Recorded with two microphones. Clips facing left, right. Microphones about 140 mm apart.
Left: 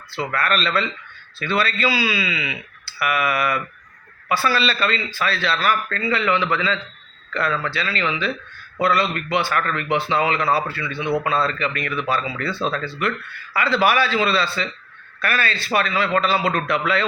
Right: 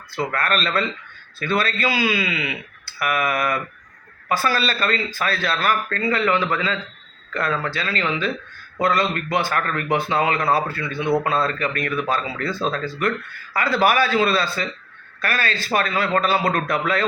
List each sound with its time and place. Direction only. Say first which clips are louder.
0.3 s speech: left 2 dB; 45° right (ahead or behind)